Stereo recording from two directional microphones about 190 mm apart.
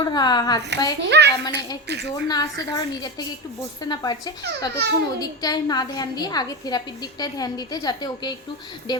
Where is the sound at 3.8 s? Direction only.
20° left (ahead or behind).